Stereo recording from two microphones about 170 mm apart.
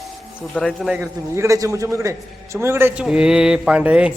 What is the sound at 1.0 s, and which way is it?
A man's voice, 15° right (ahead or behind).